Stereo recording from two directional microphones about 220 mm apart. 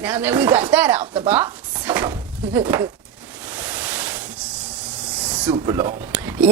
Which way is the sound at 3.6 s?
5° right (ahead or behind).